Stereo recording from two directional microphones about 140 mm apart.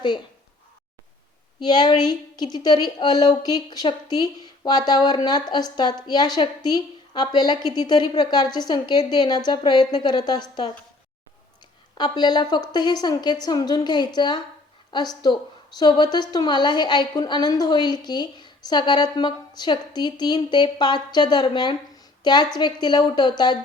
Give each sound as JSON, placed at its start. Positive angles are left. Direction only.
{"t": 1.5, "sound": "a woman's voice", "side_deg": 30}
{"t": 11.9, "sound": "a woman's voice", "side_deg": 30}